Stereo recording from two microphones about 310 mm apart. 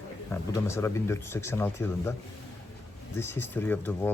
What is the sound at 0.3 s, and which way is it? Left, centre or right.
Speech, centre.